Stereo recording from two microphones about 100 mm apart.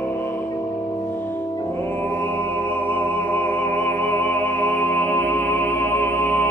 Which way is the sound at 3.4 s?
20° left (ahead or behind).